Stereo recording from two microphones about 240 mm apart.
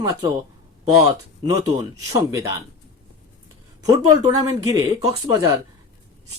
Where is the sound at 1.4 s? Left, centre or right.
Centre.